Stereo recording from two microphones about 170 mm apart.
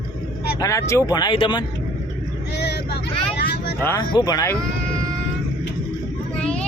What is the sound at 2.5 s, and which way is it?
Vehicle, 75° left (ahead or behind).